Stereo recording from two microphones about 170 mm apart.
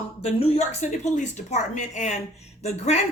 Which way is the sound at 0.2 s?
35° left (ahead or behind).